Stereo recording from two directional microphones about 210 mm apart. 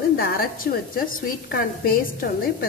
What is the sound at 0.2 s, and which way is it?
A woman's voice, 45° left (ahead or behind).